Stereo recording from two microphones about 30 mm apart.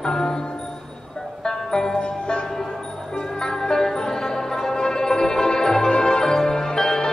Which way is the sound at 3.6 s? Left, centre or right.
Left.